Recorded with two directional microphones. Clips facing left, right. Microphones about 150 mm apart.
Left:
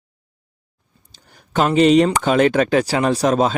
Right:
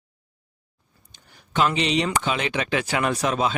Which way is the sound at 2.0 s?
45° left (ahead or behind).